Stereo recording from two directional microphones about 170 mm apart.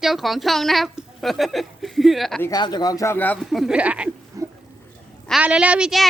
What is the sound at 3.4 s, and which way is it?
Speech, centre (ahead or behind).